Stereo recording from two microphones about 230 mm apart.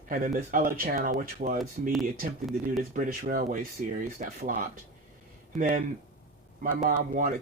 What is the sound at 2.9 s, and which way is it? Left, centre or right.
Speech, right.